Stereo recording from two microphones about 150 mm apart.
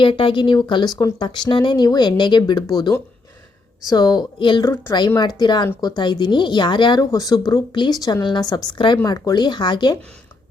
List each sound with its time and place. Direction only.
0.0 s speech: 35° left (ahead or behind)
4.6 s a woman's voice: 15° left (ahead or behind)
4.9 s speech: 30° left (ahead or behind)